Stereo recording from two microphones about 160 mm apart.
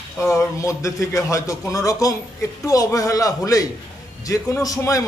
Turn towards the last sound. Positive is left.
turn(degrees=20)  # may be behind; listen again after turning